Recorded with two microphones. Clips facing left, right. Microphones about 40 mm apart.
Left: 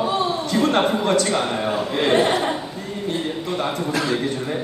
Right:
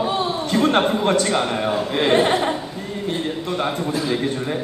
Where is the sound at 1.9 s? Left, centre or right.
Centre.